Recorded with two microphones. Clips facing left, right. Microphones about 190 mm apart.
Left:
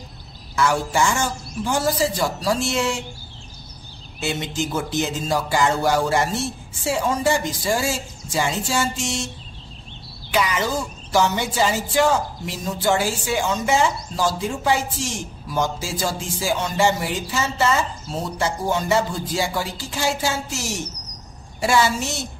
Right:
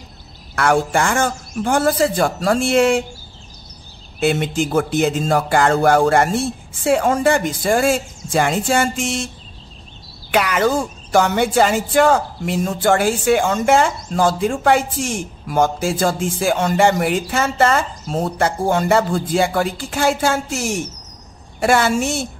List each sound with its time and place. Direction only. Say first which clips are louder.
0.6 s speech: right 4 dB; 55° right (ahead or behind)
4.2 s speech: right 7 dB; 55° right (ahead or behind)
10.3 s speech: right 5 dB; 60° right (ahead or behind)